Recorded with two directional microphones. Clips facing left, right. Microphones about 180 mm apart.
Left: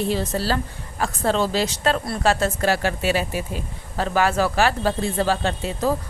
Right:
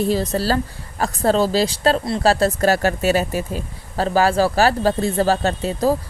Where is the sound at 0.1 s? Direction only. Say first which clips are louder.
Right 4 dB; 40° right (ahead or behind).